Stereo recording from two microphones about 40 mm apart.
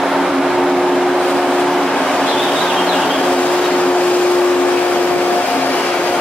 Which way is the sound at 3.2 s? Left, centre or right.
Left.